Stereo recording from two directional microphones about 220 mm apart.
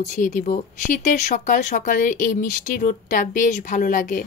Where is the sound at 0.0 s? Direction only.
35° left (ahead or behind).